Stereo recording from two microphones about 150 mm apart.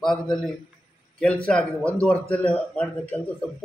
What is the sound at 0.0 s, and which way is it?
A man's voice, 5° left (ahead or behind).